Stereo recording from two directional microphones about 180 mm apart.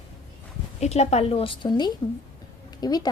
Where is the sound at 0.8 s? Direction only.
35° left (ahead or behind).